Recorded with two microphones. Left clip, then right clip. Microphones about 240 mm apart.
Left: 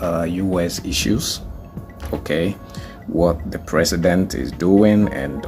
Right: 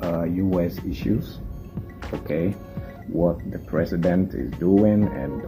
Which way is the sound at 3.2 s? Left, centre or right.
Centre.